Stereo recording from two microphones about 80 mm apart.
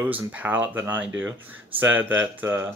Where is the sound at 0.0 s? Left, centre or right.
Right.